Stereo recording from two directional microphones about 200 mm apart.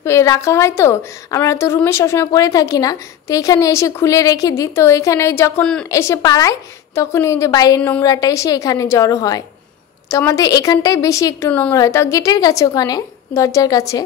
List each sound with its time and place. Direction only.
0.0 s a woman's voice: 15° left (ahead or behind)